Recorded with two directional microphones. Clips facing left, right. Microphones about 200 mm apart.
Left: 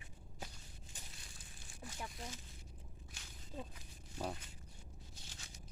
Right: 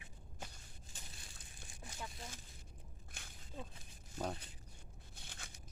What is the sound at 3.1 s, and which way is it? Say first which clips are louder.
Snake: right 2 dB; 55° right (ahead or behind).